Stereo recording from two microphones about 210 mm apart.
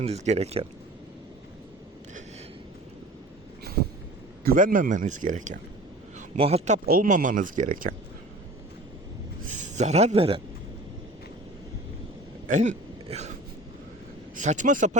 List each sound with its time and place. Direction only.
0.0 s speech: 30° right (ahead or behind)
4.4 s a man's voice: 40° right (ahead or behind)
6.8 s speech: 40° right (ahead or behind)
9.5 s speech: 35° right (ahead or behind)
12.5 s a sound: 35° right (ahead or behind)
14.4 s speech: 35° right (ahead or behind)